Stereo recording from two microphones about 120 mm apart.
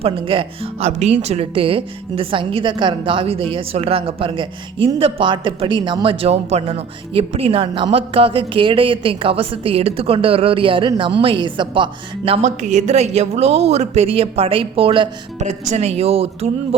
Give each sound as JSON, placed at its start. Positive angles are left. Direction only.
{"t": 0.0, "sound": "a man's voice", "side_deg": -50}
{"t": 12.4, "sound": "a woman's voice", "side_deg": -75}
{"t": 15.4, "sound": "a woman's voice", "side_deg": -75}